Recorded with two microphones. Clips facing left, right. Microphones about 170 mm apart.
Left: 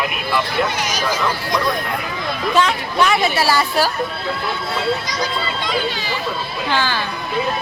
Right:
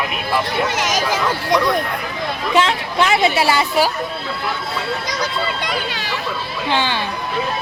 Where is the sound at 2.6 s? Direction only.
25° right (ahead or behind).